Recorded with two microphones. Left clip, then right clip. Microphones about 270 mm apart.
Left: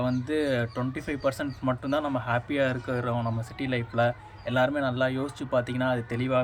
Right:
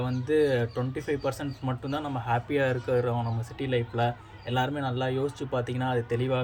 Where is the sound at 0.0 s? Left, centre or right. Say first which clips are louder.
Right 2 dB; centre.